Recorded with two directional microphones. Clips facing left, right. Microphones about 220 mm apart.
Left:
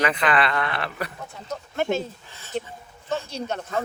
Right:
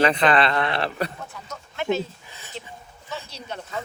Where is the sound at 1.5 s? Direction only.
50° left (ahead or behind).